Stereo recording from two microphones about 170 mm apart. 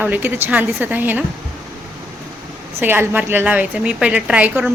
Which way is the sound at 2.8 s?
10° right (ahead or behind).